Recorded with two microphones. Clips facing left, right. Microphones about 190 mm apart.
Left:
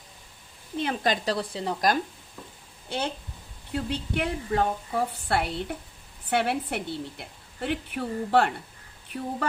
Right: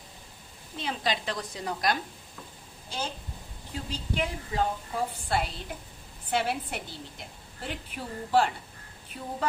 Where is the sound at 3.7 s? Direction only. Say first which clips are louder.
Left 6 dB; 65° left (ahead or behind).